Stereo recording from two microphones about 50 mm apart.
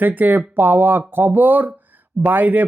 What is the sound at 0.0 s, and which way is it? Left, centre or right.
Speech, right.